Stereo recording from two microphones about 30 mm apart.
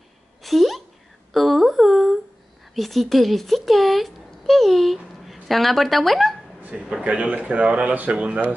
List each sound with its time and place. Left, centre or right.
0.4 s a sound: centre
5.3 s a woman's voice: centre
6.7 s a man's voice: right
7.0 s speech: right